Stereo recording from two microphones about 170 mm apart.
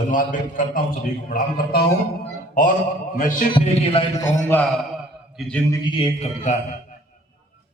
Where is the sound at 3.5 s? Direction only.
30° left (ahead or behind).